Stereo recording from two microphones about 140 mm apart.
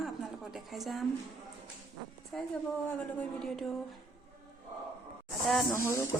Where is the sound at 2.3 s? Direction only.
5° left (ahead or behind).